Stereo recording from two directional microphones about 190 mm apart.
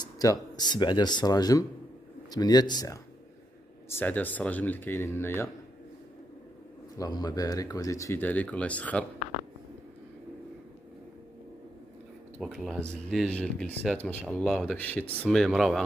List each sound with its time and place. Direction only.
0.0 s speech: 20° left (ahead or behind)
3.9 s speech: 10° left (ahead or behind)
7.0 s speech: 20° left (ahead or behind)
12.4 s speech: centre (ahead or behind)